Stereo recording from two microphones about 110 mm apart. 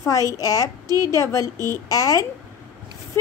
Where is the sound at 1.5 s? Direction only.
30° right (ahead or behind).